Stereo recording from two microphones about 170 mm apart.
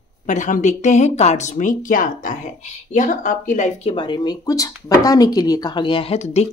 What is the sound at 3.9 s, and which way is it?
Speech, 30° left (ahead or behind).